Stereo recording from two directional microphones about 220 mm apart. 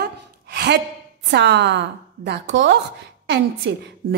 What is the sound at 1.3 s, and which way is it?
A woman's voice, 50° right (ahead or behind).